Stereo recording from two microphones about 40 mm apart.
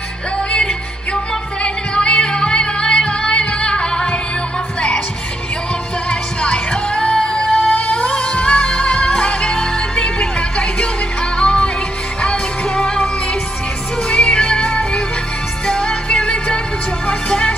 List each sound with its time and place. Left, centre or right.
1.1 s music: left
6.0 s music: left